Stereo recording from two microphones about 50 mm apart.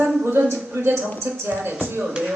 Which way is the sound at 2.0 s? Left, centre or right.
Right.